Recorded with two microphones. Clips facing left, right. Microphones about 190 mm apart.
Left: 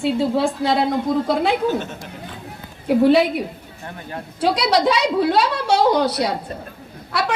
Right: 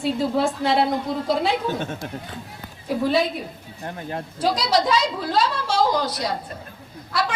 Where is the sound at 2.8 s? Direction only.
70° left (ahead or behind).